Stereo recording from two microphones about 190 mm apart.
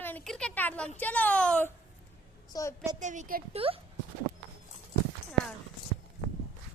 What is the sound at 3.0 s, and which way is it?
Speech, 40° right (ahead or behind).